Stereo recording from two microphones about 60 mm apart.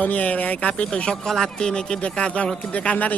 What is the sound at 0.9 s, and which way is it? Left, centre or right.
A man's voice, centre.